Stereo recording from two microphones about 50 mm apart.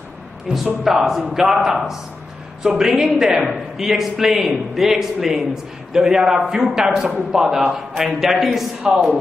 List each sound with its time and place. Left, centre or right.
0.5 s a man's voice: centre
8.8 s a man's voice: centre